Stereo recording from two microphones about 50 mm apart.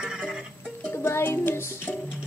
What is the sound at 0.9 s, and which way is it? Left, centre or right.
Music, left.